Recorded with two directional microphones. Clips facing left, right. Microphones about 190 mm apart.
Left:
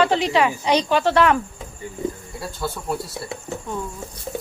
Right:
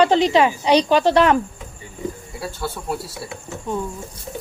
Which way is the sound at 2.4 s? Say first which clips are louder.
Even; 5° right (ahead or behind).